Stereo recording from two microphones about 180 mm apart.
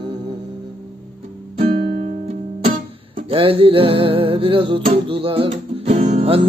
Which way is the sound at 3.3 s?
30° right (ahead or behind).